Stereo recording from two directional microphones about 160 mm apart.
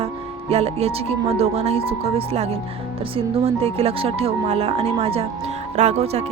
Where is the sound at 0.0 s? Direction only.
40° right (ahead or behind).